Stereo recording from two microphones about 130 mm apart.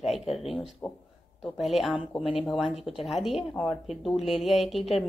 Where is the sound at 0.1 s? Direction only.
Centre (ahead or behind).